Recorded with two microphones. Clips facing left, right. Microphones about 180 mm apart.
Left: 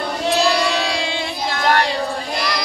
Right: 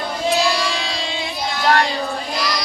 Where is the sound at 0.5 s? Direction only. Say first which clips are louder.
Left 4 dB; 65° left (ahead or behind).